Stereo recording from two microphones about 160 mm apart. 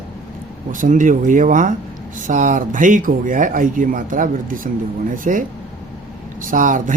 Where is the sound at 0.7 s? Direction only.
55° right (ahead or behind).